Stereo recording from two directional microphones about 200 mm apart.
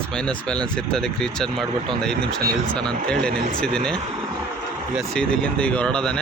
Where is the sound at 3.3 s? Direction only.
45° right (ahead or behind).